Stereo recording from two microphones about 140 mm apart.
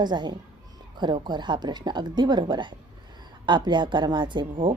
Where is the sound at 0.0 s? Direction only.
30° right (ahead or behind).